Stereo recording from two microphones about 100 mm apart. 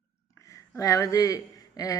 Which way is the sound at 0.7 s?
35° left (ahead or behind).